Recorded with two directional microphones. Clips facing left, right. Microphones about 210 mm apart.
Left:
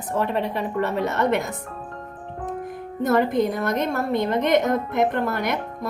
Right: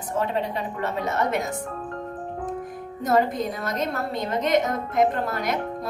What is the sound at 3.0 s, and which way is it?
A woman's voice, 60° left (ahead or behind).